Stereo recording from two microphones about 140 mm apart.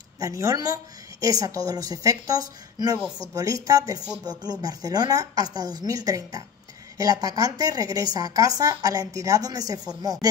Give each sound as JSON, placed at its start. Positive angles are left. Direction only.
{"t": 0.2, "sound": "a woman's voice", "side_deg": -20}